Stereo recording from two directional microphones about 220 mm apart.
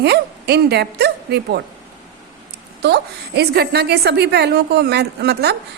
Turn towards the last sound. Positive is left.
turn(degrees=-50)  # may be behind; listen again after turning